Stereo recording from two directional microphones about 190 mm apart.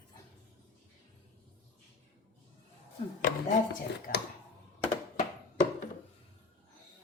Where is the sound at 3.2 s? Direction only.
45° left (ahead or behind).